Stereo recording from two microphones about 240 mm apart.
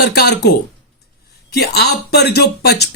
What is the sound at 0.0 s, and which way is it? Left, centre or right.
Speech, left.